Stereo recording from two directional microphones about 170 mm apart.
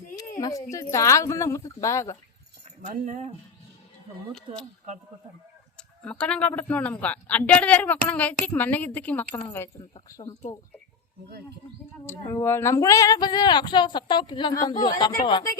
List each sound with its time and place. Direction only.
0.2 s speech: 20° left (ahead or behind)
2.8 s speech: 50° right (ahead or behind)
4.3 s speech: centre (ahead or behind)
5.7 s a sound: 5° left (ahead or behind)
6.5 s a woman's voice: 10° left (ahead or behind)
12.0 s speech: 15° left (ahead or behind)